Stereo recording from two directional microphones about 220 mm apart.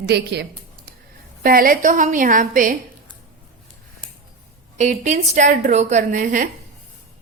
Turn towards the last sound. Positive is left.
turn(degrees=-35)  # may be behind; listen again after turning